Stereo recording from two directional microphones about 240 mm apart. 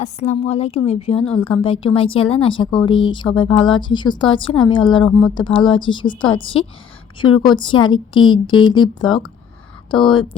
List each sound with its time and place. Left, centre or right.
0.0 s speech: left